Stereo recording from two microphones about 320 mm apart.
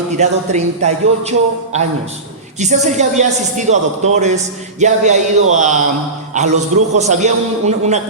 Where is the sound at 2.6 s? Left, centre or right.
Right.